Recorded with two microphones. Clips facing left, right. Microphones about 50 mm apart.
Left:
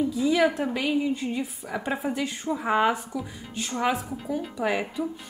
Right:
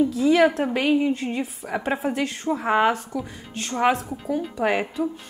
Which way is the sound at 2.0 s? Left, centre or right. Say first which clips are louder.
Right 3 dB; centre.